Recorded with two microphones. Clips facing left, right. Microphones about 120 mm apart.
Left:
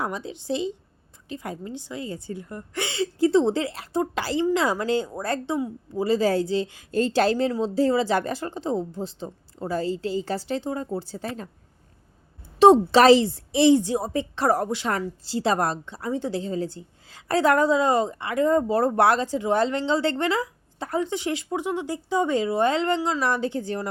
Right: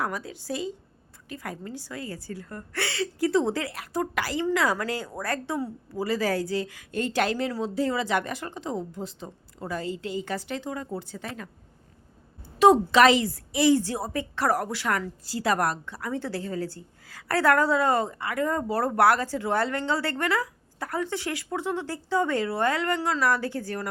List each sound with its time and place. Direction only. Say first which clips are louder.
0.0 s a woman's voice: left 1 dB; 25° left (ahead or behind)
6.1 s a woman's voice: left 5 dB; 25° left (ahead or behind)
12.5 s a woman's voice: left 3 dB; 30° left (ahead or behind)
23.0 s a woman's voice: left 2 dB; 10° left (ahead or behind)
23.2 s a woman's voice: left 1 dB; 20° left (ahead or behind)